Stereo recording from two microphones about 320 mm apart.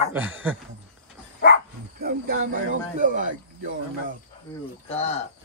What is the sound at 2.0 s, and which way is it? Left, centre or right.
Speech, right.